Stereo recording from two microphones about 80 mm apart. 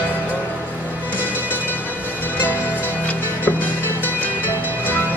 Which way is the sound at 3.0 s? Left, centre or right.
Left.